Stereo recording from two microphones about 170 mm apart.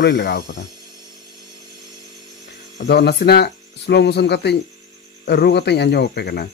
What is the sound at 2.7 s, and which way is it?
Speech, 75° left (ahead or behind).